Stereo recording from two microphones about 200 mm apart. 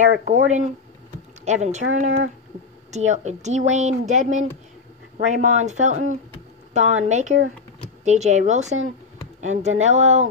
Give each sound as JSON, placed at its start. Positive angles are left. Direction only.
{"t": 0.1, "sound": "speech", "side_deg": -40}